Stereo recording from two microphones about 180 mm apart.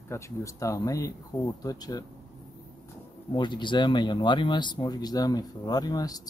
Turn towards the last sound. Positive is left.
turn(degrees=20)  # may be behind; listen again after turning